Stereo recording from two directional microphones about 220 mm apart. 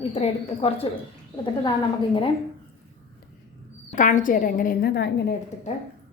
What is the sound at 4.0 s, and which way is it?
A woman's voice, 35° left (ahead or behind).